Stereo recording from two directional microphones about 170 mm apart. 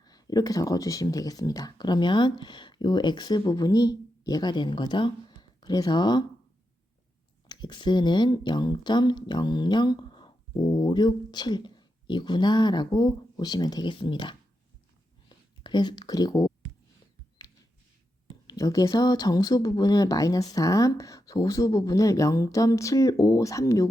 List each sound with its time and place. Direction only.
0.0 s speech: 25° left (ahead or behind)
7.4 s speech: 25° left (ahead or behind)
18.5 s speech: 20° left (ahead or behind)